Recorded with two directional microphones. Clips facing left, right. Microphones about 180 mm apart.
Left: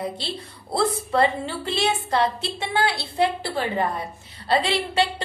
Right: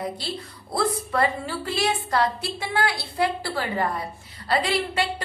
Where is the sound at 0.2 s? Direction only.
25° left (ahead or behind).